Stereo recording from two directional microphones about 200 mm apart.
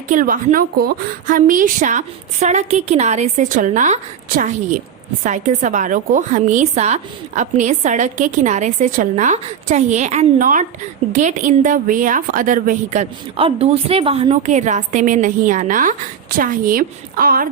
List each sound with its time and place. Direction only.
0.1 s a woman's voice: 45° right (ahead or behind)